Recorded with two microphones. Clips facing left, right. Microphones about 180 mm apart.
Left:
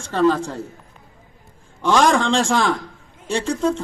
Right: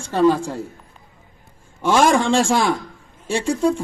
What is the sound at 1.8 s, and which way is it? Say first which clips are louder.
A man's voice: right 1 dB; 15° right (ahead or behind).